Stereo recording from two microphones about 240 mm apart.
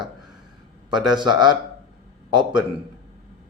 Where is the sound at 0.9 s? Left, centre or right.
Centre.